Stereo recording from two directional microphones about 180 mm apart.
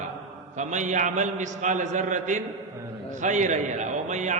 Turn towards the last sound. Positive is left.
turn(degrees=-40)  # may be behind; listen again after turning